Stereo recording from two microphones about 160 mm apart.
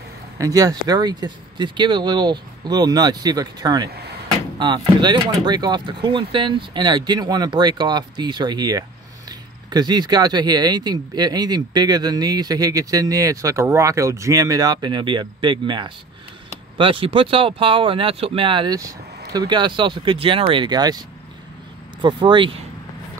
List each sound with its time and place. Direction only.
0.4 s speech: 20° right (ahead or behind)
22.0 s speech: 30° right (ahead or behind)